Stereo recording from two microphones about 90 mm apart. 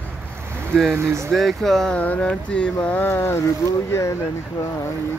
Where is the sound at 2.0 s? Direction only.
15° left (ahead or behind).